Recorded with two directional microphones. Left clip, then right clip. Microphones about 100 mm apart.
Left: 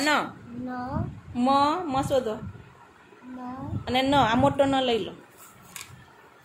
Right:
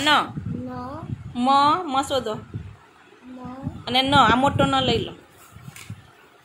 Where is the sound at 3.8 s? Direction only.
Centre (ahead or behind).